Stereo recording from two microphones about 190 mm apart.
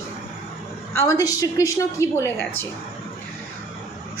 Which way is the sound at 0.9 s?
15° left (ahead or behind).